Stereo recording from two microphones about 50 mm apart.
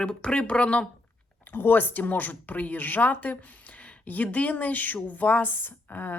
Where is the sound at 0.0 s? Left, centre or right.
Centre.